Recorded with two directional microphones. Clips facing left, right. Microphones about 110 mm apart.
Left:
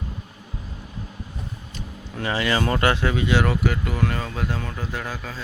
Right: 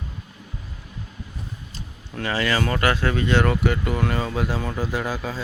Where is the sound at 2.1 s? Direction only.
20° left (ahead or behind).